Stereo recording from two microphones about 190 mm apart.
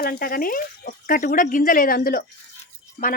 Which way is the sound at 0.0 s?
50° left (ahead or behind).